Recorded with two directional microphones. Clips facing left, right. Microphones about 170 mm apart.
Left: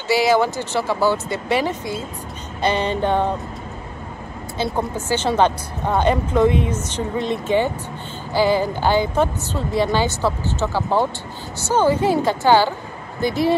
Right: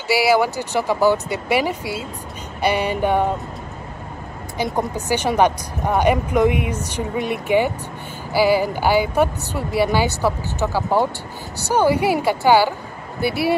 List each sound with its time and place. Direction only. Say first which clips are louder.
0.1 s speech: even; 10° right (ahead or behind)
4.6 s speech: right 1 dB; 15° right (ahead or behind)